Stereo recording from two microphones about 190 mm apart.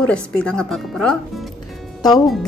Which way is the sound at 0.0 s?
5° left (ahead or behind).